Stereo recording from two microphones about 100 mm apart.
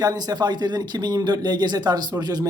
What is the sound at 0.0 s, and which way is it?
A man's voice, 40° right (ahead or behind).